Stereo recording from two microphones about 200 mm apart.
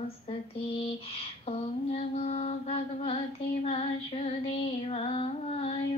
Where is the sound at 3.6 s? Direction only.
30° left (ahead or behind).